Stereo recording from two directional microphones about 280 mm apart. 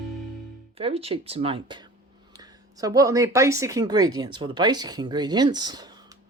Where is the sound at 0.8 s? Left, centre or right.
Right.